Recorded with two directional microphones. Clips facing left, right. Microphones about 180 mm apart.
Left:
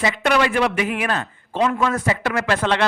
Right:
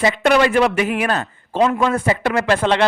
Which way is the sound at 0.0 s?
40° right (ahead or behind).